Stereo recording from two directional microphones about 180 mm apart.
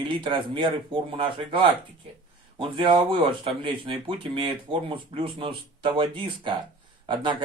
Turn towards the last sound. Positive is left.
turn(degrees=-25)  # may be behind; listen again after turning